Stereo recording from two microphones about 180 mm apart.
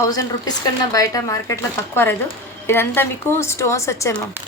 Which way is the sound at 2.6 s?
10° left (ahead or behind).